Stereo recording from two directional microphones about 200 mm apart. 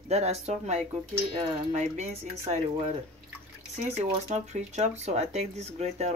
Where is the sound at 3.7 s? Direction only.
30° right (ahead or behind).